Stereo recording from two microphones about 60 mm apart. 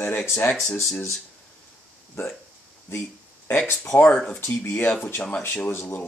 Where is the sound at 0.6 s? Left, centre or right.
Left.